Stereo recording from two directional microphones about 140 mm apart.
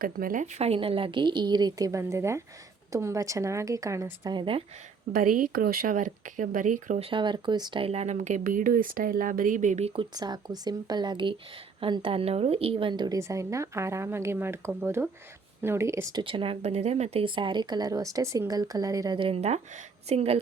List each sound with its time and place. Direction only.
0.0 s speech: 85° right
0.6 s speech: 45° right (ahead or behind); by 4.4 s 20° right (ahead or behind)
4.4 s speech: 40° right (ahead or behind)
5.1 s speech: 90° right; by 7.0 s 65° right (ahead or behind)
7.0 s speech: 35° right (ahead or behind)
10.2 s speech: 30° right (ahead or behind)
13.1 s speech: 20° right (ahead or behind)
16.2 s speech: 40° right (ahead or behind)
19.2 s speech: 45° right (ahead or behind)